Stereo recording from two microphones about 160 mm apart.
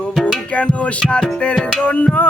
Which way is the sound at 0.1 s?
Centre (ahead or behind).